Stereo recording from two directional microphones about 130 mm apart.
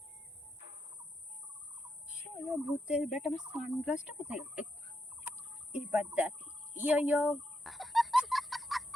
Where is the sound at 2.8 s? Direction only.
5° right (ahead or behind).